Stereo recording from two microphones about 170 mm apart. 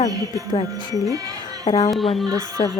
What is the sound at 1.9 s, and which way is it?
Speech, centre (ahead or behind).